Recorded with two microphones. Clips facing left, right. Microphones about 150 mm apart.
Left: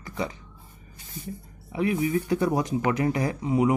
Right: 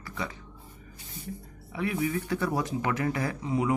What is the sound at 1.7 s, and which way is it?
Speech, 20° left (ahead or behind).